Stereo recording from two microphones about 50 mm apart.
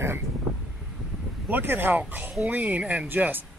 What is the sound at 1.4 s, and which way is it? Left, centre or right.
Speech, right.